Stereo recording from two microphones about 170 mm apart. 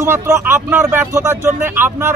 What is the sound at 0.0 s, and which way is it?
Speech, 15° right (ahead or behind).